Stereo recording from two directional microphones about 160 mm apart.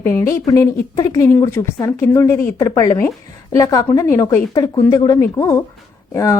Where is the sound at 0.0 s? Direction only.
15° left (ahead or behind).